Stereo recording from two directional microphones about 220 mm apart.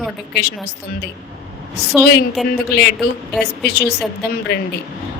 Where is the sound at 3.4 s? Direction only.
50° left (ahead or behind).